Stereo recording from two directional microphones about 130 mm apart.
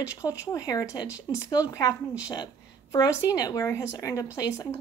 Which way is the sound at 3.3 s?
25° left (ahead or behind).